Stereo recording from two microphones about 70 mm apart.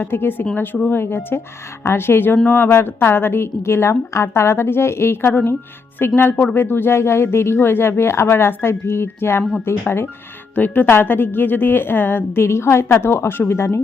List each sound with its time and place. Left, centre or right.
0.0 s speech: left
9.4 s speech: centre
9.6 s speech: left